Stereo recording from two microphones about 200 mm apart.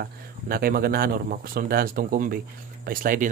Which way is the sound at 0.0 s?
50° right (ahead or behind).